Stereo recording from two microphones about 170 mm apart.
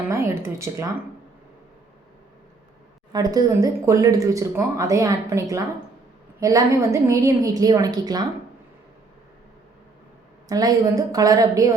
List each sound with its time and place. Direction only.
0.1 s speech: 15° right (ahead or behind)
3.1 s speech: 20° right (ahead or behind)
10.5 s speech: 20° right (ahead or behind)